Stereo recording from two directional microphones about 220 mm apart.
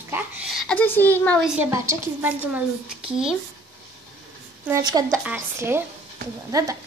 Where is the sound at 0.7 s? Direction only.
10° left (ahead or behind).